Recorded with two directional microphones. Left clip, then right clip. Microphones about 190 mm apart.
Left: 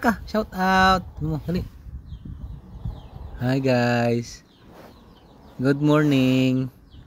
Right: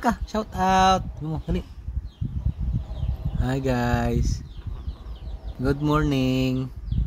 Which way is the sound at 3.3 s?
20° left (ahead or behind).